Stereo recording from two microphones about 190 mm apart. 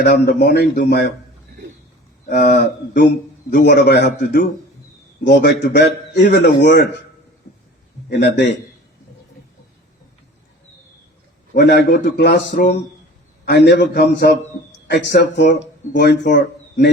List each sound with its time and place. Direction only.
0.0 s a man's voice: 60° left (ahead or behind)
2.3 s a man's voice: 55° left (ahead or behind)
6.2 s a man's voice: 50° left (ahead or behind)
8.1 s a man's voice: 60° left (ahead or behind)
11.5 s a man's voice: 55° left (ahead or behind)